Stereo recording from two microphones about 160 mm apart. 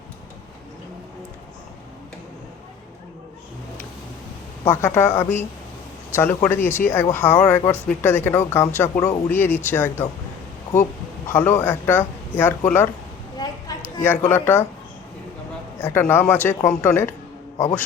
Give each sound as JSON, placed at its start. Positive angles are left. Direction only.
{"t": 4.6, "sound": "speech", "side_deg": 15}
{"t": 11.3, "sound": "speech", "side_deg": 15}
{"t": 13.3, "sound": "a sound", "side_deg": 25}
{"t": 14.3, "sound": "speech", "side_deg": 15}
{"t": 15.8, "sound": "speech", "side_deg": 15}